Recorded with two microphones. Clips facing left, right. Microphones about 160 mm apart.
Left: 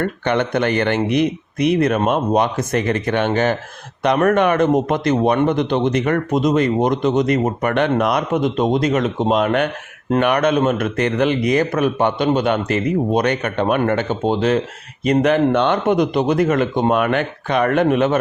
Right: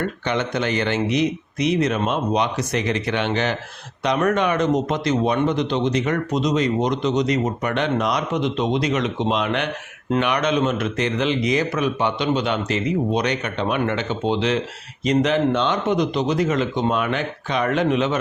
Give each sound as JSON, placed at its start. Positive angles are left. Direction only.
{"t": 0.0, "sound": "a man's voice", "side_deg": 55}